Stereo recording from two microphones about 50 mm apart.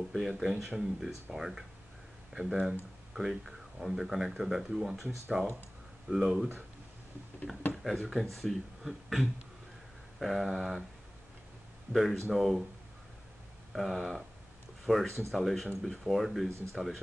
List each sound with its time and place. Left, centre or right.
0.1 s speech: centre
7.7 s speech: centre
11.9 s speech: centre
13.7 s speech: centre